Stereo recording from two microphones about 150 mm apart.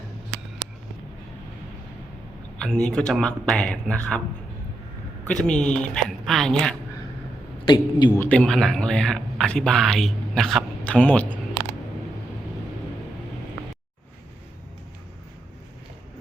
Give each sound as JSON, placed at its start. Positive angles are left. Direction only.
{"t": 2.6, "sound": "a man's voice", "side_deg": 5}
{"t": 5.2, "sound": "a man's voice", "side_deg": 5}
{"t": 7.6, "sound": "speech", "side_deg": 30}
{"t": 8.2, "sound": "a man's voice", "side_deg": 5}